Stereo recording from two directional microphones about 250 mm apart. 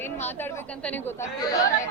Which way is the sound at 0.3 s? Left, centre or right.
Centre.